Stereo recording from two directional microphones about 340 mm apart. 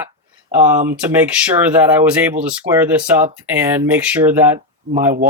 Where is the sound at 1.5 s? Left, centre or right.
Centre.